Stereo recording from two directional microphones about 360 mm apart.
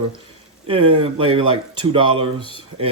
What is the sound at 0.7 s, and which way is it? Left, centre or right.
Speech, centre.